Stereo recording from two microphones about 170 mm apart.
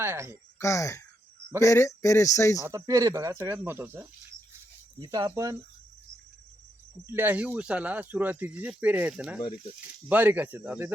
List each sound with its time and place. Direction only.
0.0 s speech: 15° right (ahead or behind)
0.6 s speech: 20° left (ahead or behind)
2.6 s speech: 20° right (ahead or behind)
7.1 s speech: 10° right (ahead or behind)